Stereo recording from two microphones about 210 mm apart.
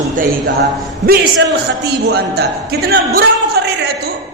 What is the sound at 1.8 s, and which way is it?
A man's voice, 50° right (ahead or behind).